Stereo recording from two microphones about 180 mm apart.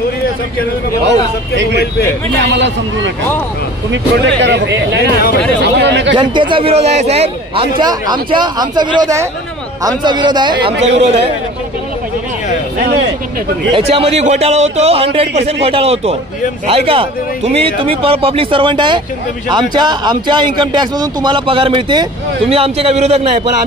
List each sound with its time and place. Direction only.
2.5 s a man's voice: 85° right
6.1 s a man's voice: 25° right (ahead or behind)
10.8 s a man's voice: 35° right (ahead or behind)
13.7 s a man's voice: 30° right (ahead or behind)